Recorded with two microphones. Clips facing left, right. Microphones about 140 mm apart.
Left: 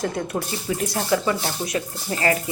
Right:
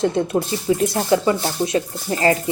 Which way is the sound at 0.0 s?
25° right (ahead or behind).